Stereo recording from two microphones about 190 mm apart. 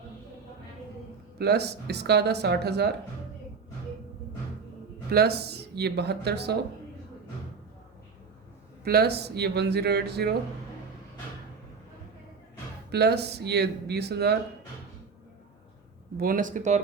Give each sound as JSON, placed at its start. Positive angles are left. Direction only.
{"t": 1.4, "sound": "speech", "side_deg": -60}
{"t": 5.1, "sound": "speech", "side_deg": -55}
{"t": 8.8, "sound": "speech", "side_deg": -55}
{"t": 12.9, "sound": "speech", "side_deg": -60}
{"t": 16.1, "sound": "speech", "side_deg": -50}